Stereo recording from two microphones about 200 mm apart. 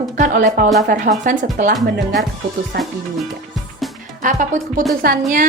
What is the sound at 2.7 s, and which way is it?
Music, 55° right (ahead or behind).